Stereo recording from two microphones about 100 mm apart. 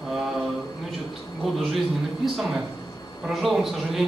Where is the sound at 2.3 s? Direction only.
Centre (ahead or behind).